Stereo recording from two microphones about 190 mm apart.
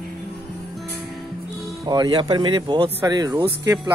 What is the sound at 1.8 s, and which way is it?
Speech, 20° right (ahead or behind).